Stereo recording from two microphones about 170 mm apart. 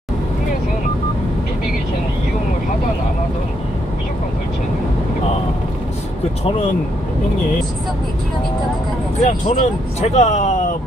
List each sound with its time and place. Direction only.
9.2 s speech: 40° left (ahead or behind)